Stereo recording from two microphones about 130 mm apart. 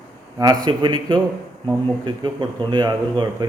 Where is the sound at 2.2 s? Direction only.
35° right (ahead or behind).